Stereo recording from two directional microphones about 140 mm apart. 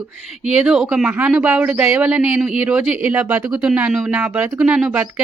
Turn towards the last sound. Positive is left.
turn(degrees=-10)  # may be behind; listen again after turning